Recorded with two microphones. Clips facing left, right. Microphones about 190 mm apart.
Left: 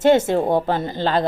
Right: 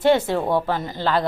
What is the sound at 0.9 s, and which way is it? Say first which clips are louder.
Speech: left 1 dB; 20° left (ahead or behind).